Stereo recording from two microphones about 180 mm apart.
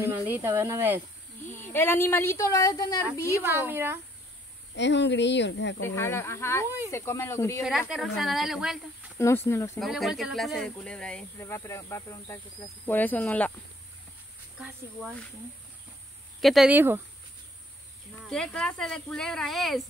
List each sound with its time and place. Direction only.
0.0 s speech: 10° right (ahead or behind)
1.5 s a woman's voice: 10° left (ahead or behind)
3.4 s speech: 10° right (ahead or behind)
4.7 s speech: 75° left (ahead or behind)
5.8 s a woman's voice: 15° left (ahead or behind)
7.9 s speech: centre (ahead or behind)
9.2 s a woman's voice: 15° left (ahead or behind)
9.8 s speech: centre (ahead or behind)
11.3 s a woman's voice: 15° left (ahead or behind)
14.6 s speech: 5° right (ahead or behind)
16.3 s speech: centre (ahead or behind)
18.2 s speech: 5° left (ahead or behind)